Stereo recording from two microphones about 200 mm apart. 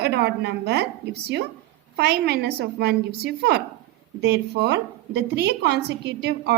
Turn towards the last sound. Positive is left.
turn(degrees=-55)  # may be behind; listen again after turning